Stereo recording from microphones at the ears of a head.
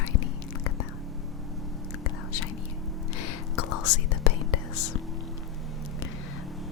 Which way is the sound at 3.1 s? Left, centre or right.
Left.